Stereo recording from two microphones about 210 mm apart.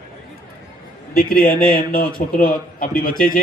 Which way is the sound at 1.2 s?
45° left (ahead or behind).